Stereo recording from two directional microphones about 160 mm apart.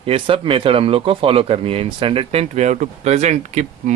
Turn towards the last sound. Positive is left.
turn(degrees=-50)  # may be behind; listen again after turning